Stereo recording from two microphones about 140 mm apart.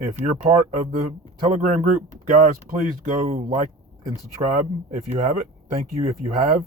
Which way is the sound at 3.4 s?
65° right (ahead or behind).